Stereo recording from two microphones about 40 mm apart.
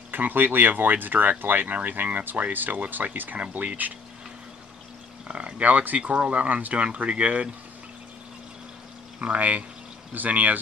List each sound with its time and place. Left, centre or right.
0.1 s speech: right
5.3 s a sound: right
5.7 s speech: right
9.2 s speech: right